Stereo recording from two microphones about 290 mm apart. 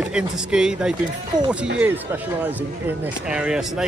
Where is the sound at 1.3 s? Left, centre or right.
Centre.